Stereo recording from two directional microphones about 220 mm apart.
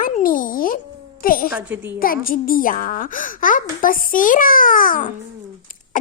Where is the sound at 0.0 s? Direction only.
40° left (ahead or behind).